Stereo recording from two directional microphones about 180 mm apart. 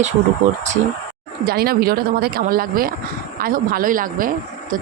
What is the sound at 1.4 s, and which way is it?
Speech, 55° right (ahead or behind).